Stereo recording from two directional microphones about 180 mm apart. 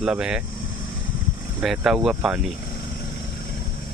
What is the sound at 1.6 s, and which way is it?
Speech, centre (ahead or behind).